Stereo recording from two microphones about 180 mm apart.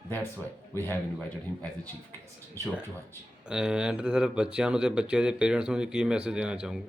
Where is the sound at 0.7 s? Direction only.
10° left (ahead or behind).